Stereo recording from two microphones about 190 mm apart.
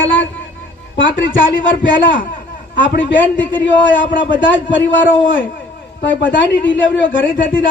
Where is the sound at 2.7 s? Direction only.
75° left (ahead or behind).